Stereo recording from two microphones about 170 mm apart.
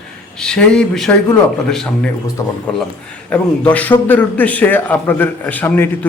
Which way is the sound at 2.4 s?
15° left (ahead or behind).